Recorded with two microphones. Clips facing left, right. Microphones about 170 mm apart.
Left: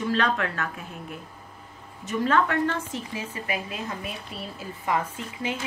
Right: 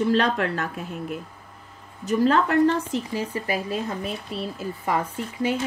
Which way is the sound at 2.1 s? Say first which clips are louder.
Right 4 dB; 35° right (ahead or behind).